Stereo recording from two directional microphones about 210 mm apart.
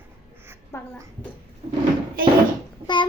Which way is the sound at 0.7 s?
15° left (ahead or behind).